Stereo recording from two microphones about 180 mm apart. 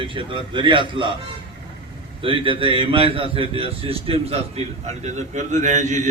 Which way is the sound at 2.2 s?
30° right (ahead or behind).